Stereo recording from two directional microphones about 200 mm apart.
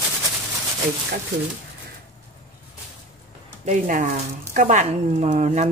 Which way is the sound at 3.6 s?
40° right (ahead or behind).